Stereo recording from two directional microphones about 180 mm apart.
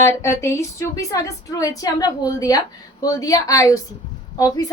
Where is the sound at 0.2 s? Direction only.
15° left (ahead or behind).